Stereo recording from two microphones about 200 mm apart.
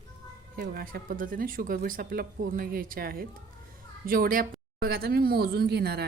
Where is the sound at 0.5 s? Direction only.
50° right (ahead or behind).